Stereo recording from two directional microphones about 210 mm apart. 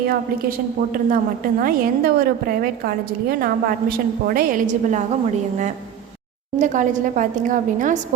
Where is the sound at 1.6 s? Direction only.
45° right (ahead or behind).